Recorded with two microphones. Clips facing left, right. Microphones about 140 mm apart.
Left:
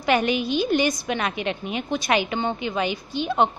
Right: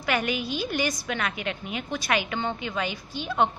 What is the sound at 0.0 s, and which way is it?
A woman's voice, 25° left (ahead or behind).